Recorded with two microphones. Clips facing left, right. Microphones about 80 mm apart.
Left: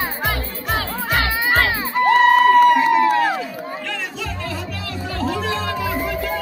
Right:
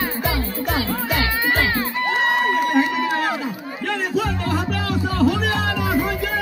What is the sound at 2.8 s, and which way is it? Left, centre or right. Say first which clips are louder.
Music: left 6 dB; left.